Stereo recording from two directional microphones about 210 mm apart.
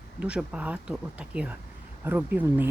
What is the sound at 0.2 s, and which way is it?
Speech, 5° right (ahead or behind).